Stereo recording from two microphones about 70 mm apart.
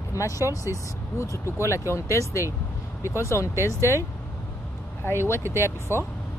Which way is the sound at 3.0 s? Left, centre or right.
Right.